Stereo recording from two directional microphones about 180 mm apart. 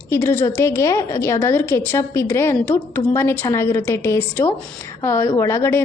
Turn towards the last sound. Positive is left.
turn(degrees=15)  # may be behind; listen again after turning